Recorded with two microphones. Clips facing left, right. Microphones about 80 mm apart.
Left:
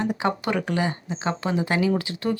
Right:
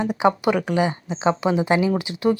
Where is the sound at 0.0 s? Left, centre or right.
Centre.